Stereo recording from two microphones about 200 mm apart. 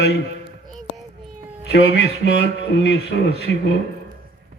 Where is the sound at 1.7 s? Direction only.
60° left (ahead or behind).